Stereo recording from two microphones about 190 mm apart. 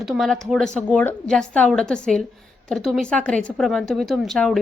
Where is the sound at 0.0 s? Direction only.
Centre (ahead or behind).